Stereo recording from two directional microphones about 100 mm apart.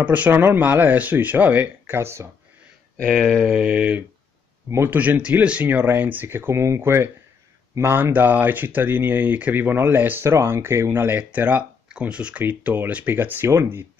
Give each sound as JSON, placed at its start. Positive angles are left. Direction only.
{"t": 0.0, "sound": "speech", "side_deg": -15}
{"t": 3.0, "sound": "a sound", "side_deg": 5}
{"t": 4.6, "sound": "speech", "side_deg": -25}